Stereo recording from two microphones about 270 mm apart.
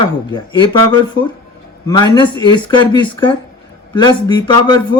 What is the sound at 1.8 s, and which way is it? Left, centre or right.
Speech, centre.